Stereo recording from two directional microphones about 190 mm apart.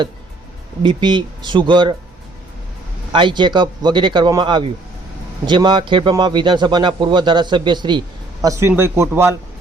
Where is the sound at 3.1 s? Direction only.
25° right (ahead or behind).